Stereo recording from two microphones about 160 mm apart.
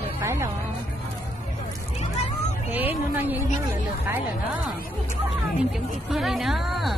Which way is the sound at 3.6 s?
15° right (ahead or behind).